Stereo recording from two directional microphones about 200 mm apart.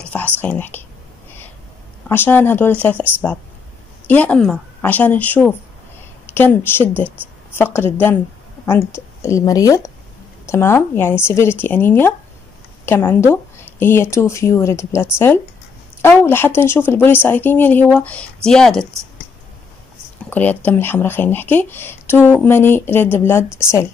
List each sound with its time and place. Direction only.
0.0 s whispering: 10° left (ahead or behind)
2.0 s speech: 10° left (ahead or behind)
20.2 s speech: 10° left (ahead or behind)